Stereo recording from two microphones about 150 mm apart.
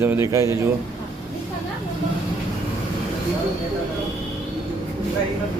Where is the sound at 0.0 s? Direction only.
20° right (ahead or behind).